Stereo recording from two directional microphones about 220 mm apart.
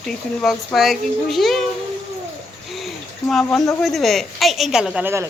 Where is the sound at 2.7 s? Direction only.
Centre (ahead or behind).